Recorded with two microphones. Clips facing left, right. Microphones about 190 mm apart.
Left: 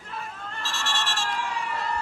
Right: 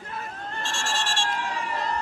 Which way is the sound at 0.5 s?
30° right (ahead or behind).